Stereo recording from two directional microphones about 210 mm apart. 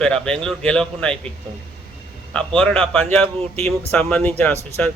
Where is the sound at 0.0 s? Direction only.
5° left (ahead or behind).